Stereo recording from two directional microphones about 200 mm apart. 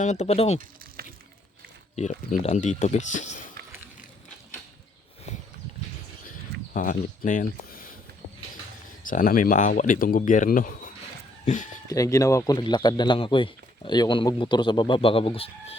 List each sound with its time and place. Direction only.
0.0 s speech: 35° left (ahead or behind)
1.0 s a sound: 50° right (ahead or behind)
2.0 s speech: 35° left (ahead or behind)
6.7 s speech: 45° left (ahead or behind)
9.0 s speech: 45° left (ahead or behind)
11.9 s a man's voice: 15° left (ahead or behind)